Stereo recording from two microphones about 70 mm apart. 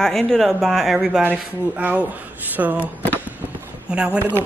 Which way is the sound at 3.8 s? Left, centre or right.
Centre.